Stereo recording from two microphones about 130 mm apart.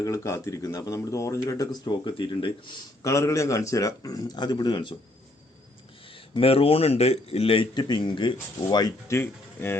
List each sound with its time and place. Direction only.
0.0 s speech: 25° left (ahead or behind); by 2.5 s 40° left (ahead or behind)
3.0 s speech: 25° left (ahead or behind)
6.3 s speech: 45° left (ahead or behind)
9.0 s speech: 20° left (ahead or behind)